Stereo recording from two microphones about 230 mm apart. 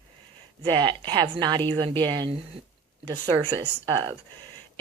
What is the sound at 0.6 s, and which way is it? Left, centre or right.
A woman's voice, centre.